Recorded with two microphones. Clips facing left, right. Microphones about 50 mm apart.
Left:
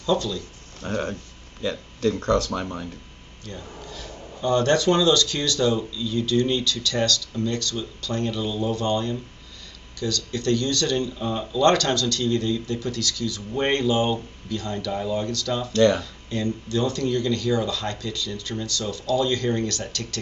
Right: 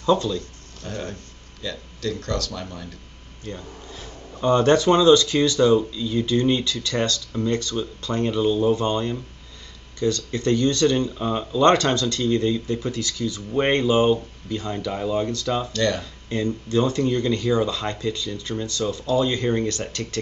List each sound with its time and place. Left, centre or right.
0.0 s speech: right
0.7 s speech: left
3.4 s speech: right
15.7 s speech: left
16.0 s speech: right